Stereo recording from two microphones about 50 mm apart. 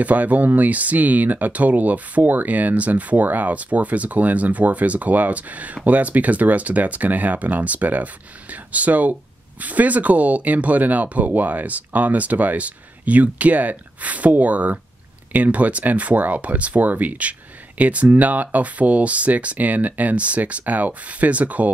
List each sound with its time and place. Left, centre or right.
0.0 s speech: right